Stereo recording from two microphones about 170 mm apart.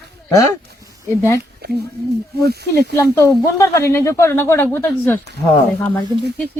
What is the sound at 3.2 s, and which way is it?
Speech, 20° left (ahead or behind).